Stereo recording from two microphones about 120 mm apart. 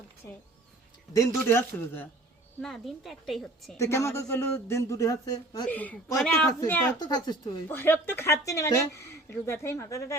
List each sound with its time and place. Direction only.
1.1 s speech: 25° left (ahead or behind)
2.6 s a woman's voice: centre (ahead or behind)
3.8 s speech: 25° left (ahead or behind)
5.6 s speech: 15° left (ahead or behind)
7.0 s speech: 35° left (ahead or behind)
7.7 s speech: 20° left (ahead or behind)